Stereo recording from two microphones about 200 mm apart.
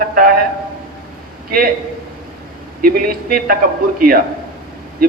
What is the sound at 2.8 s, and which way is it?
Speech, 45° right (ahead or behind).